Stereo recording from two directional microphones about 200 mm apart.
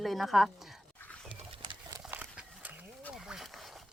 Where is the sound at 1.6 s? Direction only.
20° right (ahead or behind).